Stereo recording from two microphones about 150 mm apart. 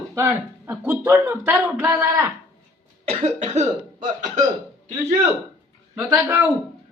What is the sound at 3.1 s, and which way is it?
Cough, 50° right (ahead or behind).